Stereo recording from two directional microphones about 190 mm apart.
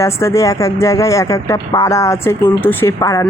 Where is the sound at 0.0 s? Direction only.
15° left (ahead or behind).